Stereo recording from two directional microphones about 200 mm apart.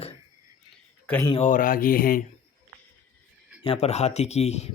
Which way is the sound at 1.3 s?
35° left (ahead or behind).